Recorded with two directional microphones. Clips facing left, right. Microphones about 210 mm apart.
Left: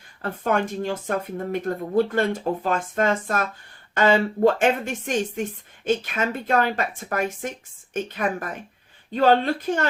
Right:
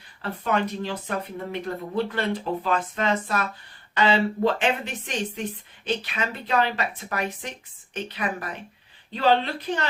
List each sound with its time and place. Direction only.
0.2 s a woman's voice: 50° left (ahead or behind)